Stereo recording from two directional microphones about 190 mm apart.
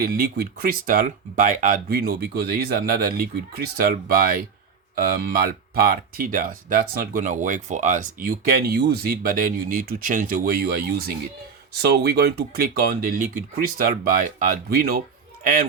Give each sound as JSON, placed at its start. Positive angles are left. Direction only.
{"t": 0.0, "sound": "speech", "side_deg": -50}